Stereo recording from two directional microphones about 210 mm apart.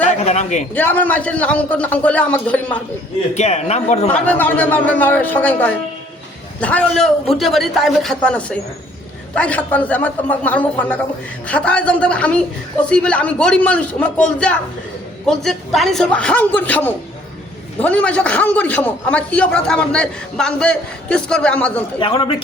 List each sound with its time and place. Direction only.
0.0 s a sound: 35° left (ahead or behind)
0.7 s a man's voice: 10° left (ahead or behind)
3.3 s a man's voice: 30° left (ahead or behind)
4.1 s a man's voice: 10° left (ahead or behind)
22.0 s a man's voice: 25° left (ahead or behind)